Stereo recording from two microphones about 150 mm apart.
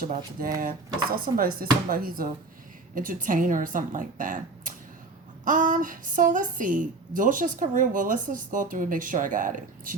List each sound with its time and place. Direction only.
0.0 s a woman's voice: 70° right (ahead or behind)